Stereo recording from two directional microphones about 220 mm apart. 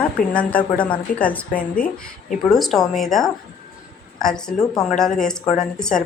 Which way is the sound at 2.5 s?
Centre (ahead or behind).